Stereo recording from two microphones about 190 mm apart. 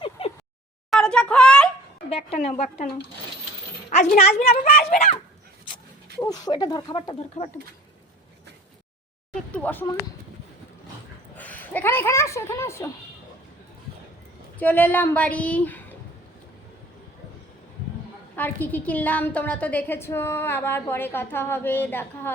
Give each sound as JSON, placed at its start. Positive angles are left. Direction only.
{"t": 0.2, "sound": "a sound", "side_deg": 30}
{"t": 0.9, "sound": "a child's voice", "side_deg": 5}
{"t": 2.0, "sound": "a woman's voice", "side_deg": 30}
{"t": 4.5, "sound": "speech", "side_deg": 50}
{"t": 6.2, "sound": "speech", "side_deg": 20}
{"t": 9.3, "sound": "a woman's voice", "side_deg": 5}
{"t": 11.3, "sound": "a woman's voice", "side_deg": 10}
{"t": 14.6, "sound": "a woman's voice", "side_deg": 10}
{"t": 18.3, "sound": "a woman's voice", "side_deg": 10}